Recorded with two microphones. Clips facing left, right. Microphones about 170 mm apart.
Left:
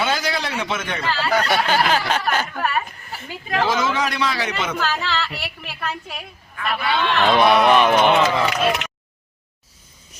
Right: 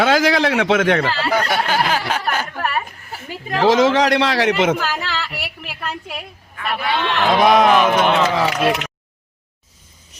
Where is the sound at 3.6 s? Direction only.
90° right.